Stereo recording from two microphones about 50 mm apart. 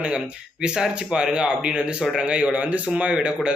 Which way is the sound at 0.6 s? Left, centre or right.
Centre.